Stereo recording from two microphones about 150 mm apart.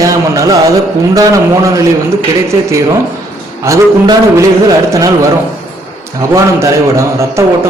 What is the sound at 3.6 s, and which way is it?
A man's voice, 20° right (ahead or behind).